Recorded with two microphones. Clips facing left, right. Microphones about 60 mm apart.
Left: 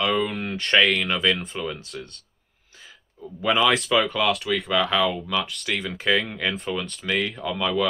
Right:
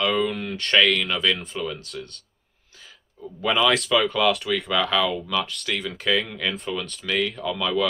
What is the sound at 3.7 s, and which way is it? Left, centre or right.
Speech, centre.